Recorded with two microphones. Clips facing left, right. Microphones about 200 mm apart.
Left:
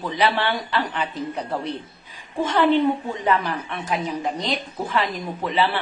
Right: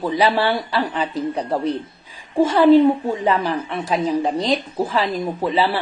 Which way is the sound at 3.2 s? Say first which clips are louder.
Right 1 dB; 30° right (ahead or behind).